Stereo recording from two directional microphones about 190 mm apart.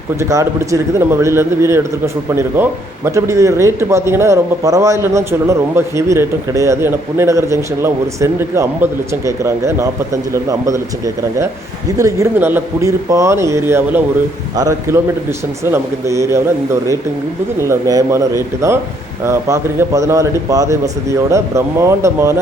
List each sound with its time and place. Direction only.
0.2 s speech: 15° right (ahead or behind)
17.6 s speech: 15° right (ahead or behind)